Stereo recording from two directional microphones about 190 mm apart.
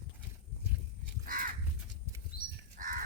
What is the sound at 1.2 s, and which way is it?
Crow, 45° right (ahead or behind).